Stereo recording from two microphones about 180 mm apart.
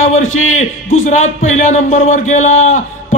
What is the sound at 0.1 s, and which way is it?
A man's voice, 40° left (ahead or behind).